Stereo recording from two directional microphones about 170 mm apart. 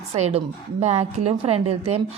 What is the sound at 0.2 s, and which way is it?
A woman's voice, 40° right (ahead or behind).